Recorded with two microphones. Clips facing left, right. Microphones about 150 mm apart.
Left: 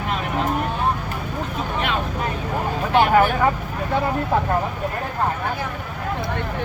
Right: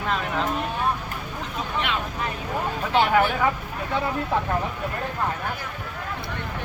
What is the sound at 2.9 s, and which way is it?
Speech, 45° left (ahead or behind).